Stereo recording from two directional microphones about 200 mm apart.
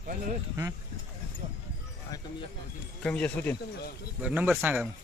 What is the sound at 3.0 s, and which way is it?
Speech, 5° left (ahead or behind).